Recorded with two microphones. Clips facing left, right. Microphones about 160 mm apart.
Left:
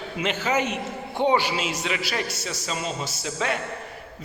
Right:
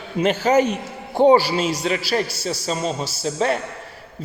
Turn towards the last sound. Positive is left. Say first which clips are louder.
# right 6 dB
turn(degrees=-35)  # may be behind; listen again after turning